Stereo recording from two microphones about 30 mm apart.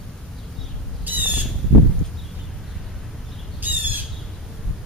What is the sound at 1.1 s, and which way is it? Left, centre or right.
Squawk, right.